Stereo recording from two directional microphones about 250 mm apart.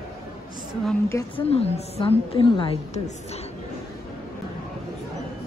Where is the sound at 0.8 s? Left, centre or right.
Centre.